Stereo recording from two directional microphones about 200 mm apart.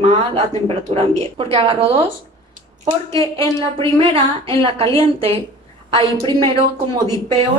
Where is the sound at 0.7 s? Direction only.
30° right (ahead or behind).